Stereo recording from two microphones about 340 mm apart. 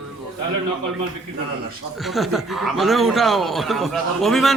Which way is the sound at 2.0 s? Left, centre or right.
Centre.